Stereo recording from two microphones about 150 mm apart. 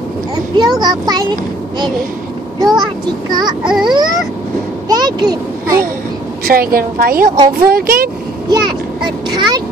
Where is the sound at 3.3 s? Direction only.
30° right (ahead or behind).